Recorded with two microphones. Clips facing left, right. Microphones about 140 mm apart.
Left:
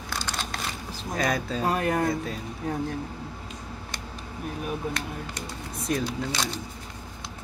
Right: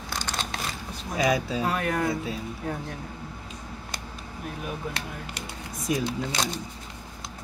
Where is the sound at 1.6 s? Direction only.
35° left (ahead or behind).